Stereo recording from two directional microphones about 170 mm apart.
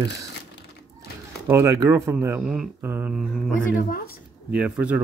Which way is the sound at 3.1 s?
5° left (ahead or behind).